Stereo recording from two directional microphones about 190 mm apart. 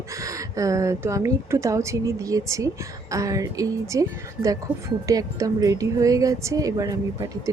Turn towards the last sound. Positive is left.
turn(degrees=-20)  # may be behind; listen again after turning